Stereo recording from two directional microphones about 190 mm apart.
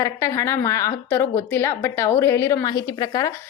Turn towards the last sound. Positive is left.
turn(degrees=20)  # may be behind; listen again after turning